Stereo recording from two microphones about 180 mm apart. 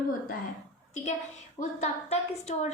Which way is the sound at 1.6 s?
40° left (ahead or behind).